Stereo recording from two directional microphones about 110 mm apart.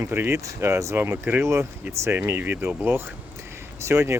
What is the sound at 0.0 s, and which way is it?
Speech, 20° right (ahead or behind).